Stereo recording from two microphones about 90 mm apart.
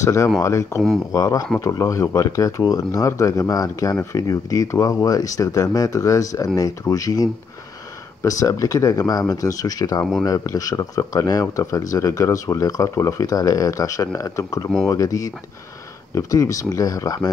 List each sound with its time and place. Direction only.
0.0 s speech: 35° left (ahead or behind)